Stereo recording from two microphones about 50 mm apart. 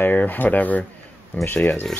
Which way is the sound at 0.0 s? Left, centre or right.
Left.